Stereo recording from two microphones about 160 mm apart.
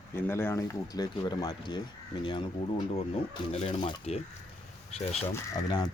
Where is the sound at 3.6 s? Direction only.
40° left (ahead or behind).